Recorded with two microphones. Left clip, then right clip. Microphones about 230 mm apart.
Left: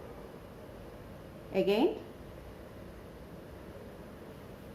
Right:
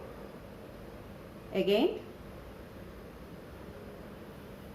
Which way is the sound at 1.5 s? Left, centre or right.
Left.